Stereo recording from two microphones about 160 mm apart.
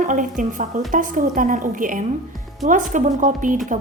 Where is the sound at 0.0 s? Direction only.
55° right (ahead or behind).